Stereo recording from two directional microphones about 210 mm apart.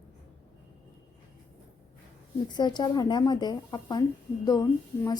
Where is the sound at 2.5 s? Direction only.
20° left (ahead or behind).